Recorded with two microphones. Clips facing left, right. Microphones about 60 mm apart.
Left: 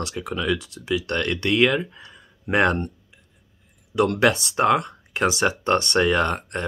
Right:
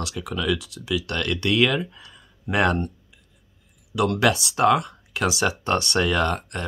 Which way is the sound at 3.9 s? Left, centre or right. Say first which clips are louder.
Left 2 dB; left.